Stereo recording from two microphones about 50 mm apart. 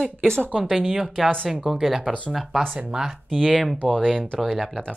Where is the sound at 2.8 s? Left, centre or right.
Centre.